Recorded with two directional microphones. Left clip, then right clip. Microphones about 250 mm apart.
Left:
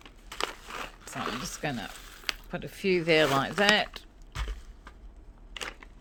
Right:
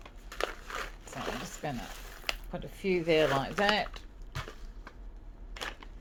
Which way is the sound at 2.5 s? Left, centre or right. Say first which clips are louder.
Left 5 dB; left.